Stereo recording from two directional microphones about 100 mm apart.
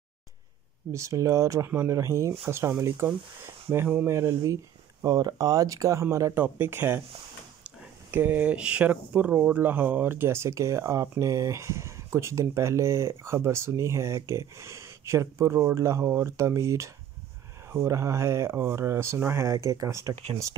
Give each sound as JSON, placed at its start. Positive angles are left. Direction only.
{"t": 0.9, "sound": "speech", "side_deg": -30}
{"t": 6.3, "sound": "speech", "side_deg": -20}